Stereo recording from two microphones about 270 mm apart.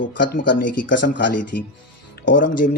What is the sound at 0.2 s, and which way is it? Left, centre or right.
Speech, left.